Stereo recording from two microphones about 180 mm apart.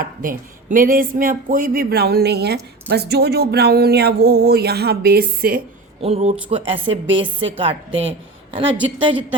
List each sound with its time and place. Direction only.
0.0 s a man's voice: 50° right (ahead or behind)
6.0 s a woman's voice: 35° right (ahead or behind)